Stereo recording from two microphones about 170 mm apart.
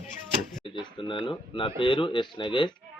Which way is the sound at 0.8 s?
30° left (ahead or behind).